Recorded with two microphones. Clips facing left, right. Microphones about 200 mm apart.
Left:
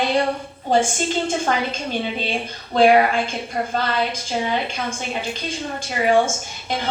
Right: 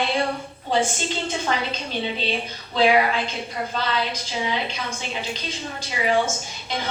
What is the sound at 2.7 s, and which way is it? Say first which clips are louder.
Speech: left 4 dB; 50° left (ahead or behind).